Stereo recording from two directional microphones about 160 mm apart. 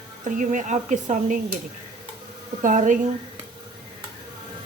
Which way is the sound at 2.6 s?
55° right (ahead or behind).